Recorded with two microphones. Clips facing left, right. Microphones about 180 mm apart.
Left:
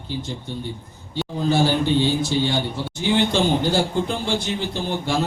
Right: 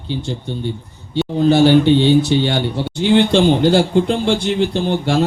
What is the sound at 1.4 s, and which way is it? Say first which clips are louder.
Speech: right 9 dB; 70° right (ahead or behind).